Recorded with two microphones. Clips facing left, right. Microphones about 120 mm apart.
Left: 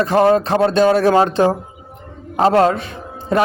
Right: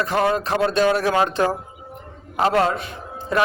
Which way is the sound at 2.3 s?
35° left (ahead or behind).